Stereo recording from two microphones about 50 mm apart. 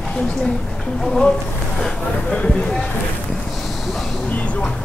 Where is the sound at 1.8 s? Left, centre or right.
Centre.